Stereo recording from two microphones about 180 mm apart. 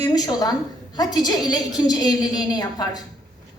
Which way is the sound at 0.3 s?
20° left (ahead or behind).